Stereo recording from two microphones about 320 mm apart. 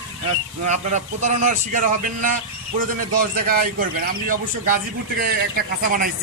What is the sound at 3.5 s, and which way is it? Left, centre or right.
A man's voice, right.